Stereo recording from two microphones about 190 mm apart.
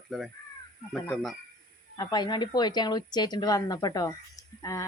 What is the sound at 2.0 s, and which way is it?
A woman's voice, 20° left (ahead or behind).